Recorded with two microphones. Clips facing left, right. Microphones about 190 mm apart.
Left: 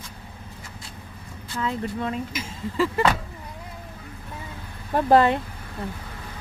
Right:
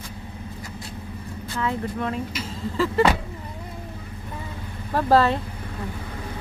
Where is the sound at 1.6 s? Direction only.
20° left (ahead or behind).